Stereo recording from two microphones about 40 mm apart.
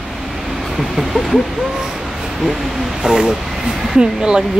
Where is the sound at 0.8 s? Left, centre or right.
Centre.